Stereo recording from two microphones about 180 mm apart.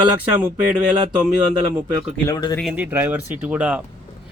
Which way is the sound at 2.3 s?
20° left (ahead or behind).